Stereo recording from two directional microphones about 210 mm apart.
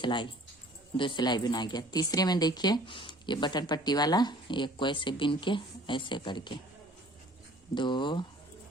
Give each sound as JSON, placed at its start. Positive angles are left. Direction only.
{"t": 0.0, "sound": "speech", "side_deg": 20}
{"t": 7.8, "sound": "speech", "side_deg": 20}